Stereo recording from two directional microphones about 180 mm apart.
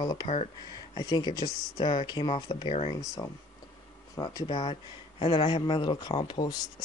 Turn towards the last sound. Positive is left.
turn(degrees=25)  # may be behind; listen again after turning